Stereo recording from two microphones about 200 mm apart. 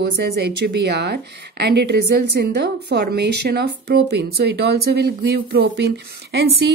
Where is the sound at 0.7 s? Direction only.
60° right (ahead or behind).